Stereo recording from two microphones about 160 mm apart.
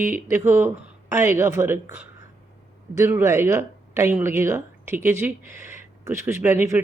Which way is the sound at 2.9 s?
15° right (ahead or behind).